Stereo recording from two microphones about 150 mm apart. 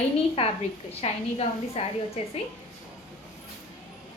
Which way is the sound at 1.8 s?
45° left (ahead or behind).